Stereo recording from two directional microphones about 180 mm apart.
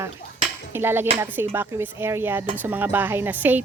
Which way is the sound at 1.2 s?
10° right (ahead or behind).